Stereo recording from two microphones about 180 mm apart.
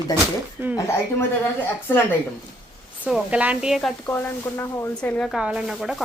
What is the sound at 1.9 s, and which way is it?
Speech, 10° left (ahead or behind).